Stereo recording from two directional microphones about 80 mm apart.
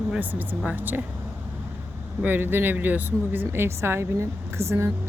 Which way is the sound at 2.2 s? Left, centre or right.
Right.